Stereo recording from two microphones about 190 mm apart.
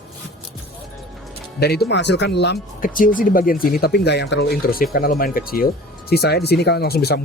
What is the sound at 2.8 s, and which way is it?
A man's voice, 45° left (ahead or behind).